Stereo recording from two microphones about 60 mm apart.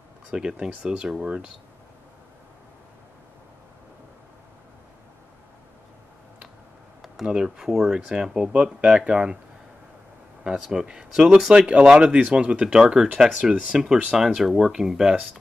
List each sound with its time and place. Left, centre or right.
0.3 s speech: centre
7.2 s speech: centre
10.4 s speech: centre
14.1 s speech: centre